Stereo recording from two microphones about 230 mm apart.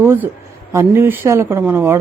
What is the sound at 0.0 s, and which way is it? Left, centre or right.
Speech, centre.